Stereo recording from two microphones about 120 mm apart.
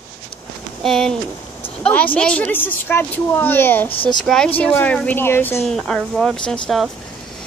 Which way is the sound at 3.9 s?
50° left (ahead or behind).